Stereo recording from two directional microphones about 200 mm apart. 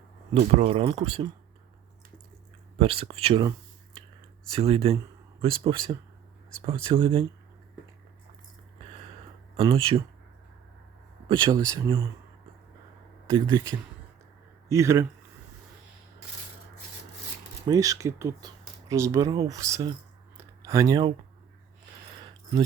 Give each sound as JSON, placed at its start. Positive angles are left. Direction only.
{"t": 0.3, "sound": "speech", "side_deg": -30}
{"t": 2.7, "sound": "speech", "side_deg": -30}
{"t": 4.5, "sound": "speech", "side_deg": -25}
{"t": 11.3, "sound": "speech", "side_deg": -25}
{"t": 13.2, "sound": "speech", "side_deg": -15}
{"t": 17.7, "sound": "speech", "side_deg": -15}